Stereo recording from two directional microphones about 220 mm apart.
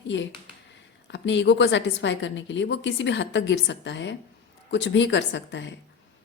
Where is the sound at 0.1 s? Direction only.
55° left (ahead or behind).